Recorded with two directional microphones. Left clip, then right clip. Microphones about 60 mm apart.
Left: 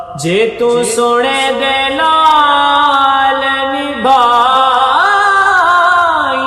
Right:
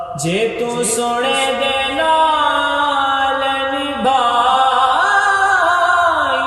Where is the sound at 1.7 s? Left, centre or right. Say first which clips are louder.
Left 4 dB; left.